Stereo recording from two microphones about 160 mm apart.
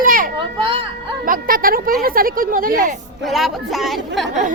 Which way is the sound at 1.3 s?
60° right (ahead or behind).